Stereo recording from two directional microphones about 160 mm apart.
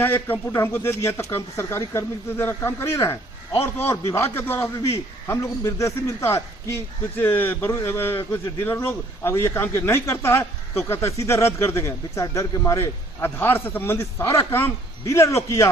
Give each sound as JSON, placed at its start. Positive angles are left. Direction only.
{"t": 0.0, "sound": "a man's voice", "side_deg": 15}